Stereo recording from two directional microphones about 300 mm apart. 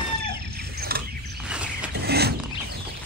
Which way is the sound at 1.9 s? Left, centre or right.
Right.